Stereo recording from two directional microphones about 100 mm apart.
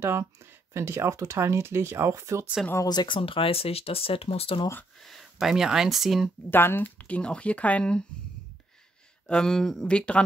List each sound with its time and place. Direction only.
0.0 s speech: 25° right (ahead or behind)
2.9 s speech: 45° left (ahead or behind)
3.2 s speech: 65° left (ahead or behind)
4.9 s speech: centre (ahead or behind)
6.5 s speech: 20° left (ahead or behind)
9.3 s speech: 5° left (ahead or behind)